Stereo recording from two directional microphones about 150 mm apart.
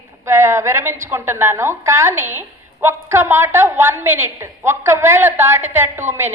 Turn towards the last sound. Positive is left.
turn(degrees=-15)  # may be behind; listen again after turning